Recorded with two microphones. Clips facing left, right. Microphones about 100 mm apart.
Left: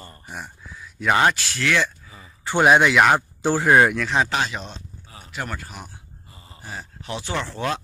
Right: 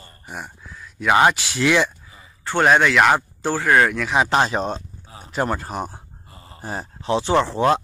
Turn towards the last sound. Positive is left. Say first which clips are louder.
# right 9 dB
turn(degrees=-30)  # may be behind; listen again after turning